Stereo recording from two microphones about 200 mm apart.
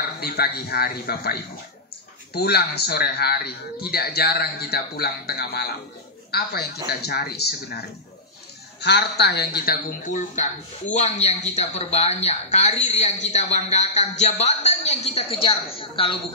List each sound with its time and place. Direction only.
0.2 s a man's voice: 50° left (ahead or behind)
8.8 s speech: 55° left (ahead or behind); by 16.2 s 25° left (ahead or behind)